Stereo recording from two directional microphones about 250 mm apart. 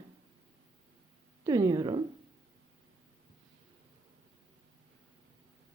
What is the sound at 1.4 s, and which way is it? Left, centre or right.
Speech, centre.